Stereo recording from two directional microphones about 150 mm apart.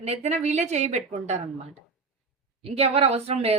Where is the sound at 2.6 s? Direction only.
40° right (ahead or behind).